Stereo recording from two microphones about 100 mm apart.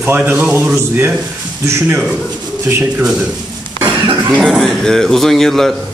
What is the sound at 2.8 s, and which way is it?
Speech, 15° right (ahead or behind).